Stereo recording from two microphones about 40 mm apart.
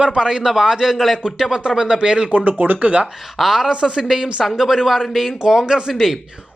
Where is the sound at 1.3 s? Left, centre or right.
Centre.